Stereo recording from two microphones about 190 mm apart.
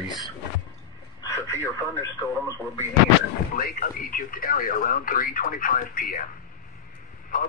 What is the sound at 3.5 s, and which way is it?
Speech, 50° left (ahead or behind).